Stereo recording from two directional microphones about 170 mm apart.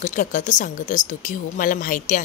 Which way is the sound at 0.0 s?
50° left (ahead or behind).